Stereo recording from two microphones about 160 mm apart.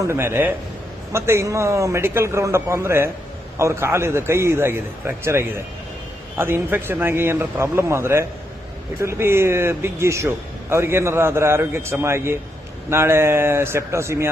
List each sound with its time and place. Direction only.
0.0 s speech: 15° right (ahead or behind)